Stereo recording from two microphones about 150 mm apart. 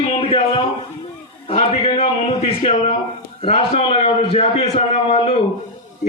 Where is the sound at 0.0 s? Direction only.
40° left (ahead or behind).